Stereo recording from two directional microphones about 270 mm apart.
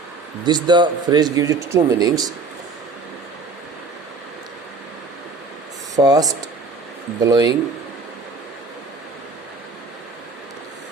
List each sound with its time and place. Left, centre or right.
0.4 s speech: centre
6.0 s speech: centre